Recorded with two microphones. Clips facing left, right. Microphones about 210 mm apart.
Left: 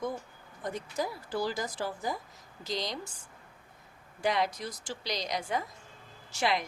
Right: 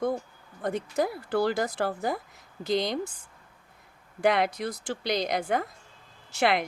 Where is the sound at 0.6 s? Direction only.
60° right (ahead or behind).